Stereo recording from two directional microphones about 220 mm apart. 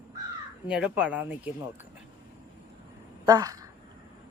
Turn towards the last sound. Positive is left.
turn(degrees=-15)  # may be behind; listen again after turning